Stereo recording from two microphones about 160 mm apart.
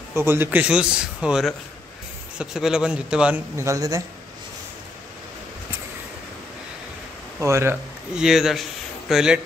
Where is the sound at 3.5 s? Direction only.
20° right (ahead or behind).